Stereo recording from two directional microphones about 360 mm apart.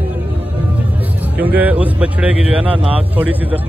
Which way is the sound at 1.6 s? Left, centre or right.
Centre.